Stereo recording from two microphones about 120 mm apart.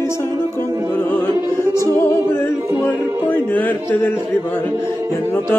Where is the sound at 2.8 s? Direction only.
15° left (ahead or behind).